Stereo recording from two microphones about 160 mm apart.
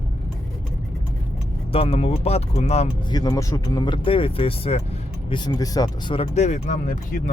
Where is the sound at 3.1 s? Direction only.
25° left (ahead or behind).